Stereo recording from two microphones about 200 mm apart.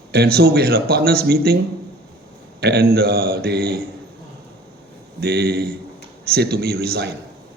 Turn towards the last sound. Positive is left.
turn(degrees=-50)  # may be behind; listen again after turning